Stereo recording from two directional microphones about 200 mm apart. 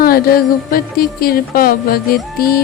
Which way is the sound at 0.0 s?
50° left (ahead or behind).